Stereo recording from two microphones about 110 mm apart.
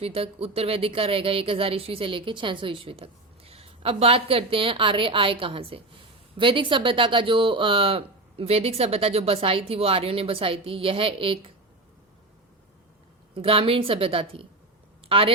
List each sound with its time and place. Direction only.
0.0 s speech: 60° right (ahead or behind)
13.3 s speech: 55° right (ahead or behind)